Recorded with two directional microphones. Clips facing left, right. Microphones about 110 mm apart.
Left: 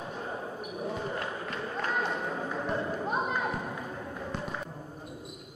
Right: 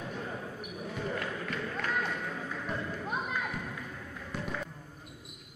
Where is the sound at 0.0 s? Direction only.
25° left (ahead or behind).